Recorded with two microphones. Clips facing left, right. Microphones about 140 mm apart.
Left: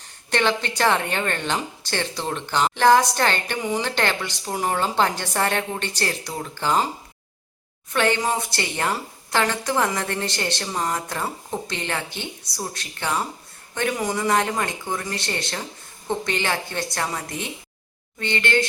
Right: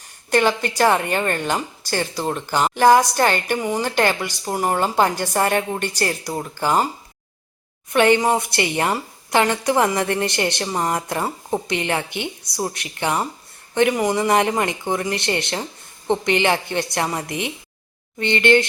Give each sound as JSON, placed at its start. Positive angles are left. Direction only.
{"t": 0.3, "sound": "a woman's voice", "side_deg": -10}
{"t": 7.9, "sound": "a woman's voice", "side_deg": -15}